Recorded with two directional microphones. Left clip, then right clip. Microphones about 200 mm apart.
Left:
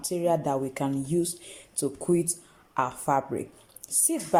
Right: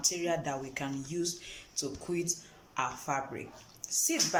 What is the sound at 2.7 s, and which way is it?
Speech, 30° left (ahead or behind).